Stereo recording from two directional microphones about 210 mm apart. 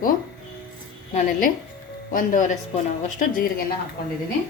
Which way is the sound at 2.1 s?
40° left (ahead or behind).